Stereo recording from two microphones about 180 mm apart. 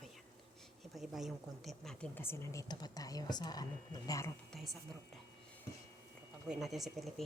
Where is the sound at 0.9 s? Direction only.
Centre (ahead or behind); by 4.3 s 20° left (ahead or behind).